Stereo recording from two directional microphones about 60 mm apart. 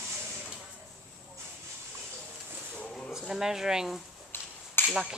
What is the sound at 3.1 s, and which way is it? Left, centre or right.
Speech, centre.